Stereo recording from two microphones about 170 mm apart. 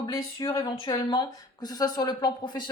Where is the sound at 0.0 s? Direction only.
25° left (ahead or behind).